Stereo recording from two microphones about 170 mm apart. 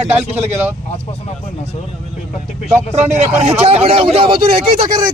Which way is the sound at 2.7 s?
40° right (ahead or behind).